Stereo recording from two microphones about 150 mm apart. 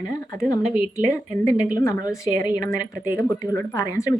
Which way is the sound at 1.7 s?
25° left (ahead or behind).